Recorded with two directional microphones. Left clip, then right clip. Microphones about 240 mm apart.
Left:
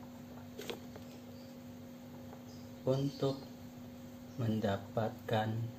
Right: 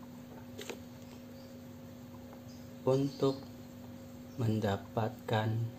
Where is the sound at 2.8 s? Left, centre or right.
Right.